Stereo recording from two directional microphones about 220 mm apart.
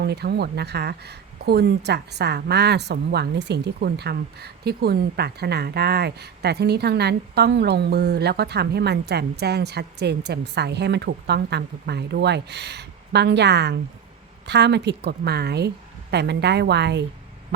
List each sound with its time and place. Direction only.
0.0 s speech: 50° right (ahead or behind)